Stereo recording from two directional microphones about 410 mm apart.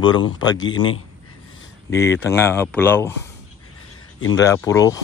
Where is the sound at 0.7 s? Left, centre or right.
Left.